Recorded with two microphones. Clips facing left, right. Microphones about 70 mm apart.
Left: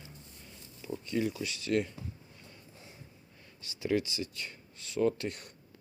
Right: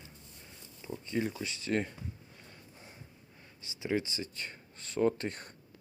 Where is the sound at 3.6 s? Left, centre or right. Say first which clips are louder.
Left 2 dB; right.